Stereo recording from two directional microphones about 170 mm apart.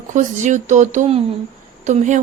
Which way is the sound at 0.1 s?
45° right (ahead or behind).